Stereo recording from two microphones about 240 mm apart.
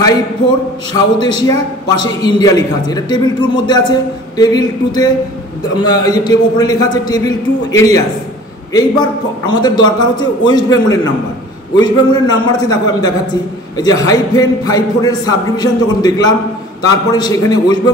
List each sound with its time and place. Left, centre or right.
0.9 s a man's voice: centre
9.0 s a man's voice: centre